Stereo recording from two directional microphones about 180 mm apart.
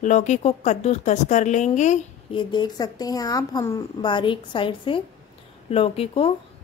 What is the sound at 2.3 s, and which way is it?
A woman's voice, 25° left (ahead or behind).